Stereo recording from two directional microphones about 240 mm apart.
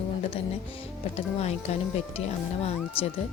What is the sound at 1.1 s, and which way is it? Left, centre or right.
Speech, left.